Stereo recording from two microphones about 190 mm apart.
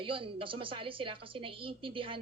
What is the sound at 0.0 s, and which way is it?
A woman's voice, 25° right (ahead or behind).